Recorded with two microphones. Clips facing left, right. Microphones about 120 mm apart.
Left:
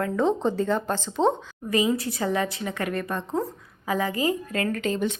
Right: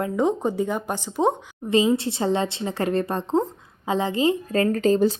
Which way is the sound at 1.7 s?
25° right (ahead or behind).